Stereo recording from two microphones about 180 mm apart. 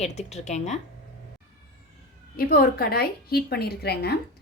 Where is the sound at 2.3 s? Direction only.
55° left (ahead or behind).